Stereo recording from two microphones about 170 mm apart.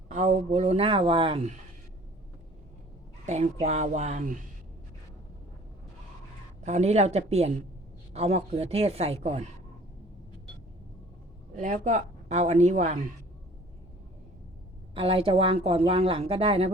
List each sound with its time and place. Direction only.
0.1 s speech: 45° right (ahead or behind)
3.2 s speech: 40° right (ahead or behind)
6.6 s speech: 40° right (ahead or behind)
11.5 s a woman's voice: 45° right (ahead or behind)
14.9 s speech: 30° right (ahead or behind)